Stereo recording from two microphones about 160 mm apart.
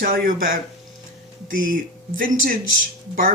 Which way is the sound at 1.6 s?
60° right (ahead or behind).